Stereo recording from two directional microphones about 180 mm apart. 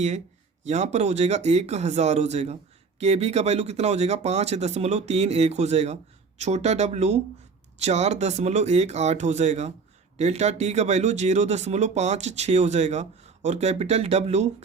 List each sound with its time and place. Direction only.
0.6 s speech: 40° right (ahead or behind)